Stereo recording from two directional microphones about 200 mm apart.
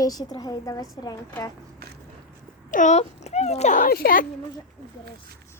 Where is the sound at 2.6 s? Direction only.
40° left (ahead or behind).